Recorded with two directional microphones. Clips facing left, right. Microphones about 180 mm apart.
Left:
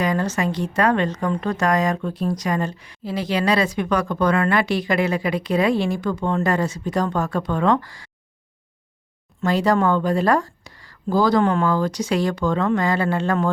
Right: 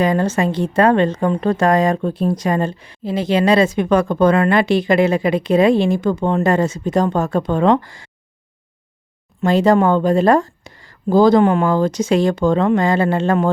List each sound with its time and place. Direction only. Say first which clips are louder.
0.0 s speech: right 5 dB; 25° right (ahead or behind)
9.4 s speech: right 5 dB; 25° right (ahead or behind)